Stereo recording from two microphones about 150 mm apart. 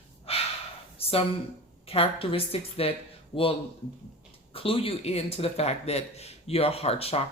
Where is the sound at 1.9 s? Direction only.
40° left (ahead or behind).